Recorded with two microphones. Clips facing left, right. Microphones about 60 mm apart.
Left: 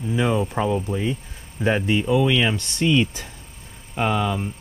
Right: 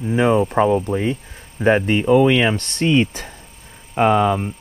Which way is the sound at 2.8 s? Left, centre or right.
Right.